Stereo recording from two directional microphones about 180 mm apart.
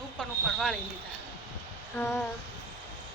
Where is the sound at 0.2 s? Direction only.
5° left (ahead or behind).